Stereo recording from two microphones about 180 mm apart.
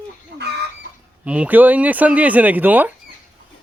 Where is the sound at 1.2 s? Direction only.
10° right (ahead or behind).